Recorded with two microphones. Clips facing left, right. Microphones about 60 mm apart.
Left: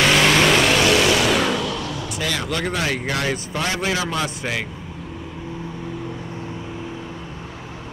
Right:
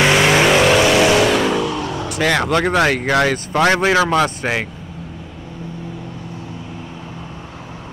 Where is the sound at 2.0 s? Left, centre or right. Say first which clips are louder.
Right 10 dB; right.